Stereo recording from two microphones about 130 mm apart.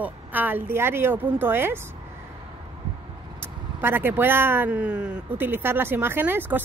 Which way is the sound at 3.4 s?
15° right (ahead or behind).